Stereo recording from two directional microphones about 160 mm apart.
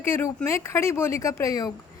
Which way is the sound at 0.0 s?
15° left (ahead or behind).